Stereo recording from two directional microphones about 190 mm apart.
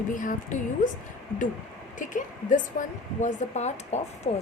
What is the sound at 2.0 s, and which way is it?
A woman's voice, 40° left (ahead or behind).